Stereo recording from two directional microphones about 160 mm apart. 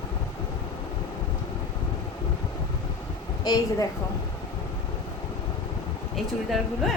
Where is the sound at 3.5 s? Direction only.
25° left (ahead or behind).